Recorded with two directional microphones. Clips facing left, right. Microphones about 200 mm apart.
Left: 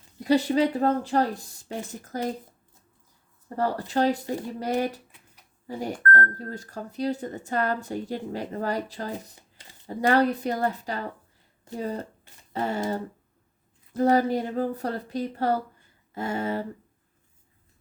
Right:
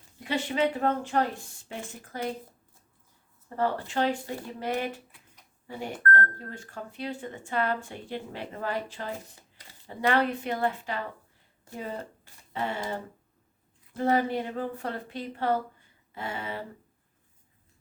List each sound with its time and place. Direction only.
0.2 s speech: 40° left (ahead or behind)
3.5 s speech: 40° left (ahead or behind)
12.5 s speech: 40° left (ahead or behind)
16.1 s a sound: 45° left (ahead or behind)